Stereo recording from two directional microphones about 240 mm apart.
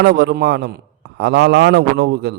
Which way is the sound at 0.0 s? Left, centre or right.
Right.